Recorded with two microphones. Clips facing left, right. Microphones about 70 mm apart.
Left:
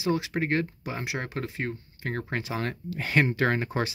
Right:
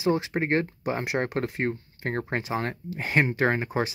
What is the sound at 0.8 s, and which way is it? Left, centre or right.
Speech, right.